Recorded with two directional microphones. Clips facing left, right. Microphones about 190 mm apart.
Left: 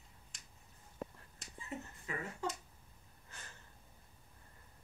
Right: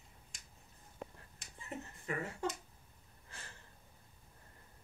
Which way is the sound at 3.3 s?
30° right (ahead or behind).